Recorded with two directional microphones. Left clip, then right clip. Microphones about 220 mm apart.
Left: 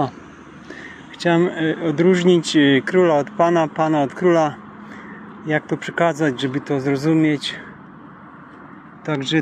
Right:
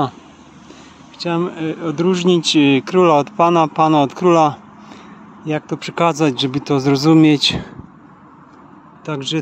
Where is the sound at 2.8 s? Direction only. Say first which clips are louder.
Right 3 dB; 15° right (ahead or behind).